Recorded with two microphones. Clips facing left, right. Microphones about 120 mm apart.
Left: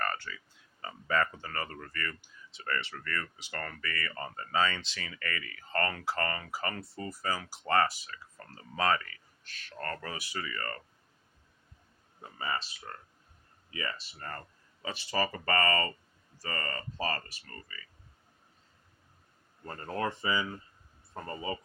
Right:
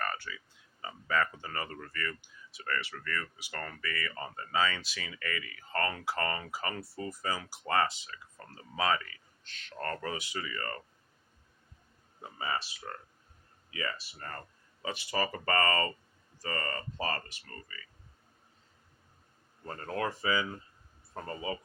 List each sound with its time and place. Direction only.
0.0 s a sound: 10° right (ahead or behind)
1.0 s speech: centre (ahead or behind)
1.4 s speech: 20° right (ahead or behind)
2.6 s speech: centre (ahead or behind); by 8.5 s 20° right (ahead or behind)
8.7 s speech: 10° right (ahead or behind)
9.5 s speech: 20° right (ahead or behind)
12.2 s speech: 10° right (ahead or behind)
14.8 s speech: 15° right (ahead or behind)
20.0 s speech: 5° right (ahead or behind)